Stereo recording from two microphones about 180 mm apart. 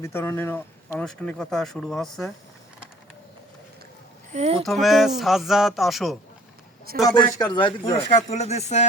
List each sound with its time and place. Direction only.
0.0 s speech: 15° left (ahead or behind)
4.3 s speech: 35° right (ahead or behind)
4.6 s speech: centre (ahead or behind)
7.0 s speech: 20° left (ahead or behind)
8.3 s speech: 35° left (ahead or behind)